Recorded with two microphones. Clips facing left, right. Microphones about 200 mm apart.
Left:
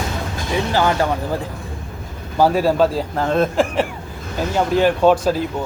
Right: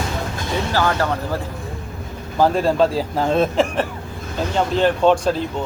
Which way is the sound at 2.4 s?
5° left (ahead or behind).